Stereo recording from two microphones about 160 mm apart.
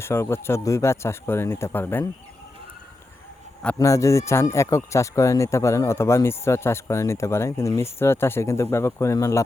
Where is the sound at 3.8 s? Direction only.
20° left (ahead or behind).